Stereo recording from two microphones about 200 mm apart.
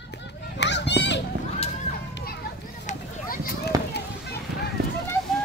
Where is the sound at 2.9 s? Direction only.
45° left (ahead or behind).